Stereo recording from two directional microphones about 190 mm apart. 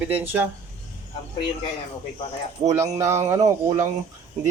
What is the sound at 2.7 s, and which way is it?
Speech, 15° right (ahead or behind).